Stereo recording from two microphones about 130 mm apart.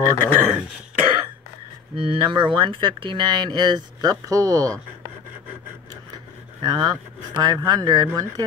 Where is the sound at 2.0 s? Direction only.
40° right (ahead or behind); by 4.7 s 25° right (ahead or behind).